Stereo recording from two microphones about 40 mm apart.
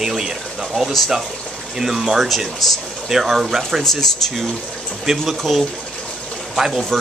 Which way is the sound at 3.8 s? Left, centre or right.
Centre.